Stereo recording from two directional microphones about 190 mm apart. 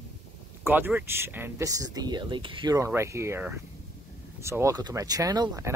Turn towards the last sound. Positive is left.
turn(degrees=-20)  # may be behind; listen again after turning